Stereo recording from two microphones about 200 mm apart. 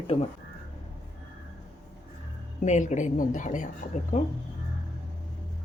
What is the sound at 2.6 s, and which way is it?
A woman's voice, 35° left (ahead or behind).